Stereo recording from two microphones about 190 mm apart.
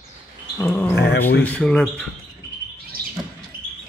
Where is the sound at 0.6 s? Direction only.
10° left (ahead or behind).